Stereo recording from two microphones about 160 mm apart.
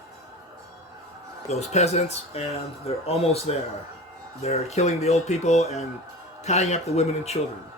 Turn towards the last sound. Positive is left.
turn(degrees=40)  # may be behind; listen again after turning